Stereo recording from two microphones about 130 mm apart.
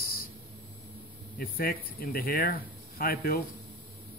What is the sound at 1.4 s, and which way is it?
Speech, 90° left.